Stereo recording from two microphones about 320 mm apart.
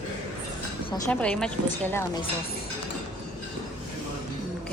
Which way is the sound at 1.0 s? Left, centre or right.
Centre.